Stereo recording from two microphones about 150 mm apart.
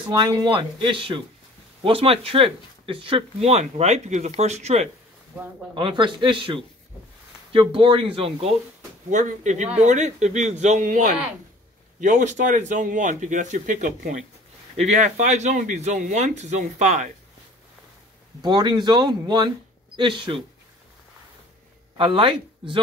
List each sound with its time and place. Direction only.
0.1 s speech: 25° right (ahead or behind); by 4.8 s 45° right (ahead or behind)
5.8 s speech: 35° right (ahead or behind)
9.1 s speech: 55° right (ahead or behind)
18.4 s speech: 30° right (ahead or behind)
21.9 s speech: 35° right (ahead or behind)